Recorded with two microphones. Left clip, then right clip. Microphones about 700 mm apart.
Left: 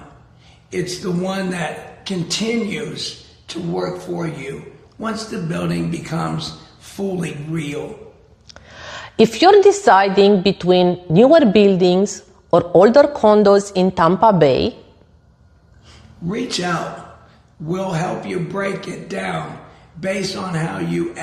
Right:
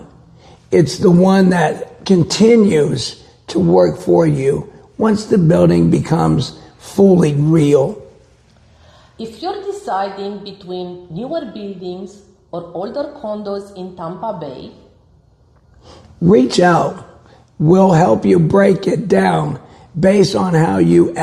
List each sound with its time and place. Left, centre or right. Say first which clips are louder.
0.7 s a man's voice: right 11 dB; right
9.1 s a woman's voice: left 14 dB; left
12.5 s a woman's voice: left 13 dB; left
15.9 s a man's voice: right 16 dB; right